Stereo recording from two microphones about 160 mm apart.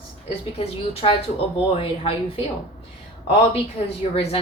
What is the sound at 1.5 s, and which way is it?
Speech, 35° left (ahead or behind).